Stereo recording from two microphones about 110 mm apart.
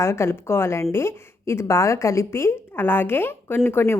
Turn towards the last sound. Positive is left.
turn(degrees=20)  # may be behind; listen again after turning